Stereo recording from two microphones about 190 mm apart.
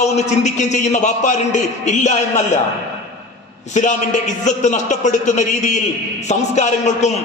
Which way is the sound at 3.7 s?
40° left (ahead or behind).